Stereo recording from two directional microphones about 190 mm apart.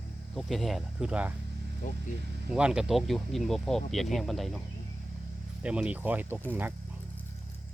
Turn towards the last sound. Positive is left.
turn(degrees=-10)  # may be behind; listen again after turning